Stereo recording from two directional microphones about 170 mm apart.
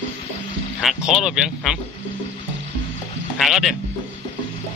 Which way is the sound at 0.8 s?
Centre (ahead or behind).